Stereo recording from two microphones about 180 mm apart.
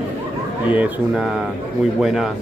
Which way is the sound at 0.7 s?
10° right (ahead or behind).